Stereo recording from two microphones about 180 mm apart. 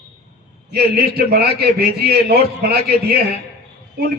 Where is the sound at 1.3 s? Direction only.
60° right (ahead or behind).